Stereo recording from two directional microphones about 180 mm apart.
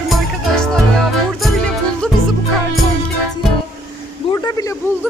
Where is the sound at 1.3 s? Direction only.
Centre (ahead or behind).